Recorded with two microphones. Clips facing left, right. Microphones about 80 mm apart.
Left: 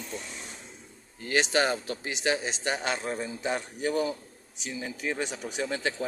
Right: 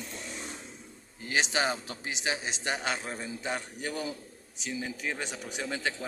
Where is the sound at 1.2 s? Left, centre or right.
Centre.